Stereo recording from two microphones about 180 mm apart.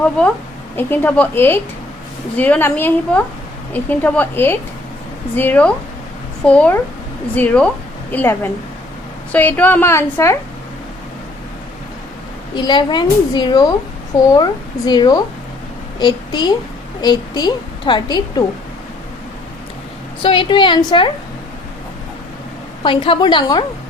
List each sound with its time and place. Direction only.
0.0 s a woman's voice: 5° left (ahead or behind)
12.5 s a woman's voice: 25° left (ahead or behind)
20.2 s a woman's voice: 30° left (ahead or behind)
22.8 s a woman's voice: 25° left (ahead or behind)